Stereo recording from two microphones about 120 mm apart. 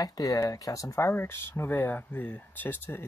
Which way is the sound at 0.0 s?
30° left (ahead or behind).